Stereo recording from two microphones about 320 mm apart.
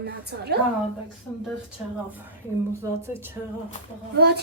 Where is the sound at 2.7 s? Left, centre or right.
Centre.